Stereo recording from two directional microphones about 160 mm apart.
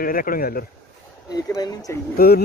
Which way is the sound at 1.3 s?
25° left (ahead or behind).